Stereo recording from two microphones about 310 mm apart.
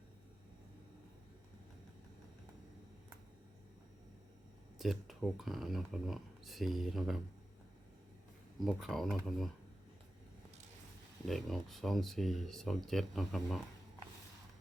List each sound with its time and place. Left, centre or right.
4.8 s speech: centre
8.5 s speech: centre
11.3 s speech: centre